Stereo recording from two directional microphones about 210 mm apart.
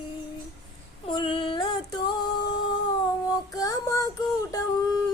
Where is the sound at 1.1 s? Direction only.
20° left (ahead or behind).